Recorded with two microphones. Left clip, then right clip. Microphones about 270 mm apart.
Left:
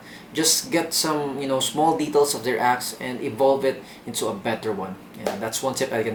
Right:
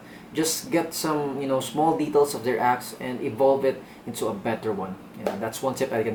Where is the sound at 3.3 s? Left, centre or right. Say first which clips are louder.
Left 1 dB; right.